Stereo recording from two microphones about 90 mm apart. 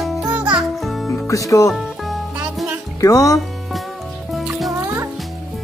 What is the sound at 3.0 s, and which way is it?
Speech, 40° left (ahead or behind).